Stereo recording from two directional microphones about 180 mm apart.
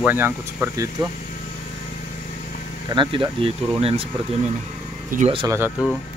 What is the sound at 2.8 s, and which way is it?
Speech, 25° right (ahead or behind).